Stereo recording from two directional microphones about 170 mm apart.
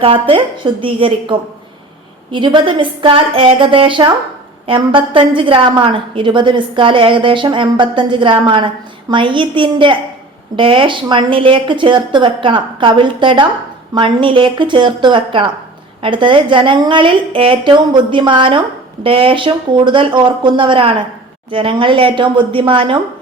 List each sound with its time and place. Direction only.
0.0 s a woman's voice: 30° right (ahead or behind)